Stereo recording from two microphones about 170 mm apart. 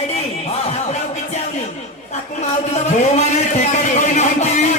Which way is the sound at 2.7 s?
40° left (ahead or behind).